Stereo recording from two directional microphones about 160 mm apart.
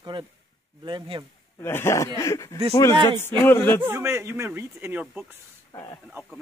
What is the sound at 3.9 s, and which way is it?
Speech, 15° right (ahead or behind).